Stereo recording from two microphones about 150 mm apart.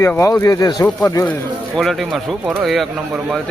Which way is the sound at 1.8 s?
Centre (ahead or behind).